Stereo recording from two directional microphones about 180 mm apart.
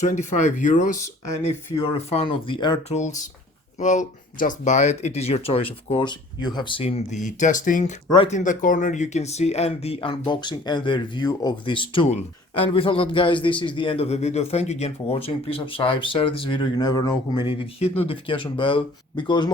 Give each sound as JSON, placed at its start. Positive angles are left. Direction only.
{"t": 0.0, "sound": "speech", "side_deg": 40}
{"t": 1.8, "sound": "a man's voice", "side_deg": 30}
{"t": 2.9, "sound": "a man's voice", "side_deg": 40}